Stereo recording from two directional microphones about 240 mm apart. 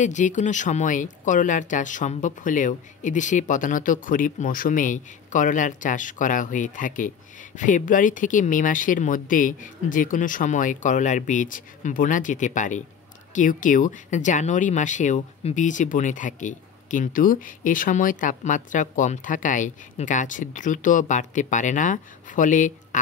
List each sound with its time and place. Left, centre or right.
0.0 s speech: left